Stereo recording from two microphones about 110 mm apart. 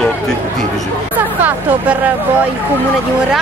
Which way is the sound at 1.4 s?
15° right (ahead or behind).